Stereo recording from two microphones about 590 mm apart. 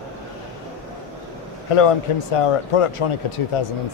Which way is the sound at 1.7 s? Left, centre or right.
Left.